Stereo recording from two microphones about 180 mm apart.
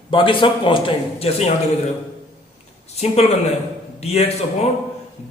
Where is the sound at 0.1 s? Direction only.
30° left (ahead or behind).